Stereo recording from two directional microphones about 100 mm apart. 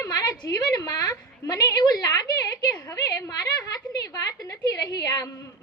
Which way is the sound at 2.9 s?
35° left (ahead or behind).